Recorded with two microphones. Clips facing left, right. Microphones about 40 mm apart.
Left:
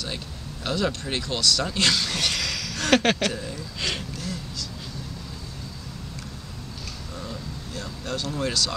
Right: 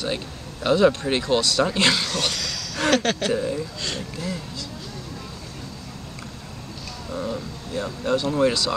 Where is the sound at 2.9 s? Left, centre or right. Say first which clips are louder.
Left 1 dB; centre.